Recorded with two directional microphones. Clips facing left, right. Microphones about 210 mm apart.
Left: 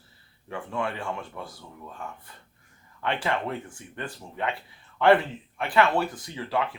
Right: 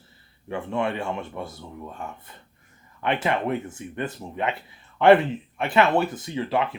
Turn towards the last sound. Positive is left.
turn(degrees=-20)  # may be behind; listen again after turning